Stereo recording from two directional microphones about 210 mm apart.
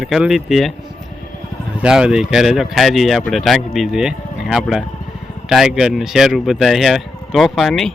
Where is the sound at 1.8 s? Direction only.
5° right (ahead or behind).